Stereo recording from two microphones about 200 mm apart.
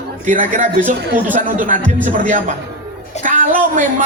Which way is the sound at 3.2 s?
40° right (ahead or behind).